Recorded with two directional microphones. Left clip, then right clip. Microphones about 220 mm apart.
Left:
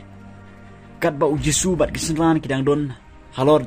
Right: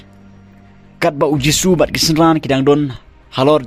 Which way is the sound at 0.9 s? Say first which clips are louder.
Right 5 dB; 40° right (ahead or behind).